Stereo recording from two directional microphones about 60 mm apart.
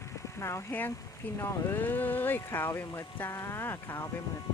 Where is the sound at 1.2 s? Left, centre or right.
Left.